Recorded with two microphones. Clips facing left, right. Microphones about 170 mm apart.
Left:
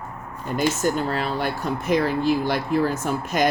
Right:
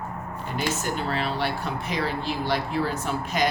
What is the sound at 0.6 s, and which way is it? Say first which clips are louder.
Speech: left 6 dB; 45° left (ahead or behind).